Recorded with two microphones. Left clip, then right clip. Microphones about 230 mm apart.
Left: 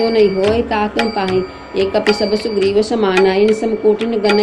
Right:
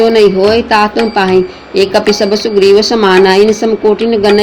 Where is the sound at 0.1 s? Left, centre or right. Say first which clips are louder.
Right 6 dB; right.